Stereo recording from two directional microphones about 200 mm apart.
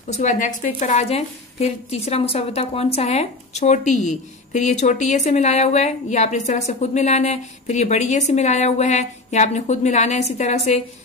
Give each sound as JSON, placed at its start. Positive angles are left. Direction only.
{"t": 0.1, "sound": "a woman's voice", "side_deg": 35}